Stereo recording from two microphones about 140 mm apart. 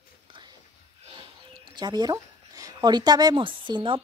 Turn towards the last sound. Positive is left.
turn(degrees=-35)  # may be behind; listen again after turning